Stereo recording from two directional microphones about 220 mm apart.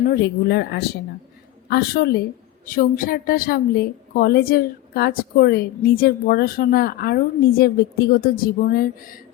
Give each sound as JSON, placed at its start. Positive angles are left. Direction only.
{"t": 0.0, "sound": "a woman's voice", "side_deg": 45}